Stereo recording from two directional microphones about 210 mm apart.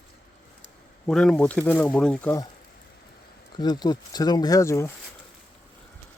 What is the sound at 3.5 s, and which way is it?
Speech, 20° left (ahead or behind).